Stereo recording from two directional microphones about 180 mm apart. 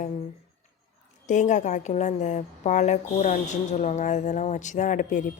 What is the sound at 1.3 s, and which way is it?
A woman's voice, 45° left (ahead or behind).